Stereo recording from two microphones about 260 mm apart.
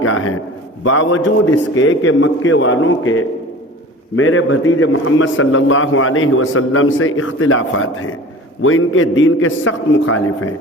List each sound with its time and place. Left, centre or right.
0.0 s a man's voice: left